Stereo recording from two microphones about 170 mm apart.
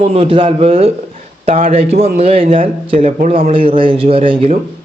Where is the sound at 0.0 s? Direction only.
35° right (ahead or behind).